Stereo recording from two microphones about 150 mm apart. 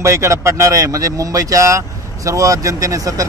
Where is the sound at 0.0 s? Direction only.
20° right (ahead or behind).